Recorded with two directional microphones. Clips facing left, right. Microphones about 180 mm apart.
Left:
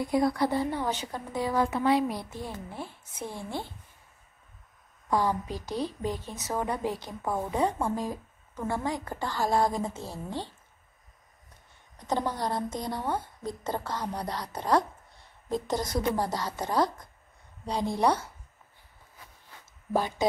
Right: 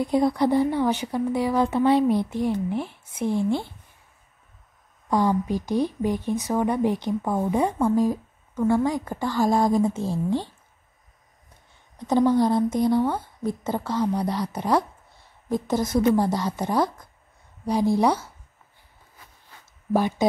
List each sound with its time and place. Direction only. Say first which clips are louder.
0.0 s speech: right 5 dB; 20° right (ahead or behind)
5.1 s speech: right 6 dB; 15° right (ahead or behind)
12.1 s a woman's voice: right 10 dB; 10° right (ahead or behind)
16.2 s speech: right 7 dB; 15° right (ahead or behind)
19.9 s speech: right 5 dB; 15° right (ahead or behind)